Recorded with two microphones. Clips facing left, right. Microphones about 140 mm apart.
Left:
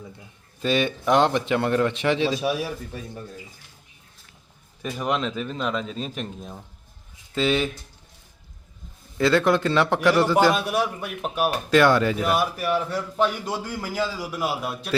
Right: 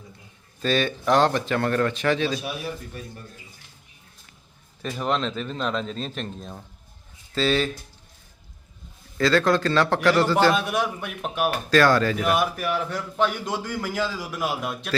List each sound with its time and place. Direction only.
0.6 s a man's voice: 15° left (ahead or behind)
4.8 s a man's voice: 10° left (ahead or behind)
9.1 s a man's voice: 20° left (ahead or behind); by 11.5 s 5° left (ahead or behind)
11.7 s a man's voice: 20° left (ahead or behind)
12.2 s a man's voice: centre (ahead or behind)